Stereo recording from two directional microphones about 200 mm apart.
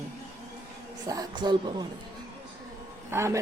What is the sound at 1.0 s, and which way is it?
Speech, 20° right (ahead or behind).